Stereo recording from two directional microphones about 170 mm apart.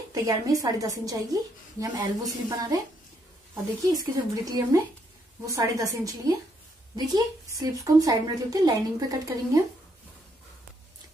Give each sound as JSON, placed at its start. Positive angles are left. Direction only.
{"t": 0.1, "sound": "a woman's voice", "side_deg": -20}
{"t": 4.0, "sound": "a woman's voice", "side_deg": -20}